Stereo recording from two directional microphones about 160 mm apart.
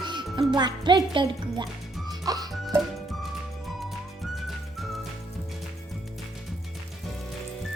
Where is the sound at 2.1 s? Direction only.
25° right (ahead or behind).